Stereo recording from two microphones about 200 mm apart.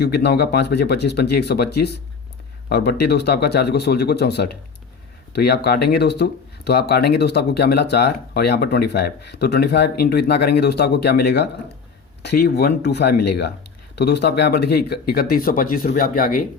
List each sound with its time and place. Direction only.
0.0 s speech: 55° left (ahead or behind)